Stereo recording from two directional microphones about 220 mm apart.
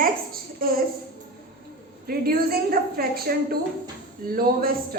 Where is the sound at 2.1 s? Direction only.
45° right (ahead or behind).